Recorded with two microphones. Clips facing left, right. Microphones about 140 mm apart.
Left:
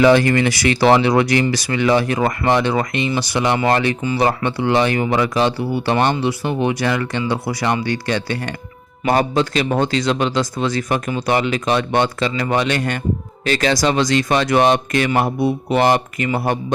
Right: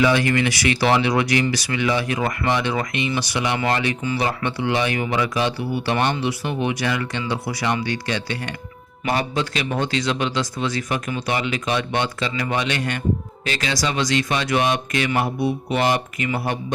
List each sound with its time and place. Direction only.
0.0 s speech: 45° left (ahead or behind)